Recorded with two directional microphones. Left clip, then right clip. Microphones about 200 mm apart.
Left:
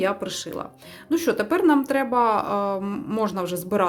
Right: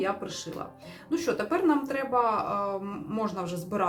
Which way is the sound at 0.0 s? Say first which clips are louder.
Left 6 dB; 55° left (ahead or behind).